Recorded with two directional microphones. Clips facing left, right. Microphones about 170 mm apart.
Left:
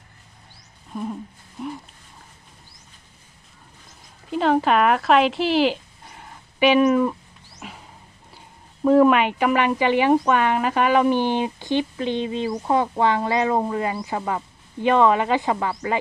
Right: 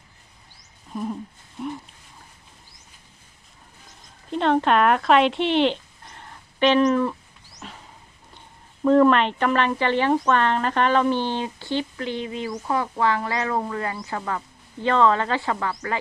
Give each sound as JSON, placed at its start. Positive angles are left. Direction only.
{"t": 0.9, "sound": "a sound", "side_deg": 0}
{"t": 4.3, "sound": "speech", "side_deg": 5}
{"t": 7.6, "sound": "wild animals", "side_deg": 10}
{"t": 8.8, "sound": "speech", "side_deg": 10}